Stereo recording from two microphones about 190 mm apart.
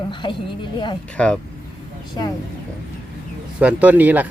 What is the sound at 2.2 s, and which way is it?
Speech, 20° left (ahead or behind).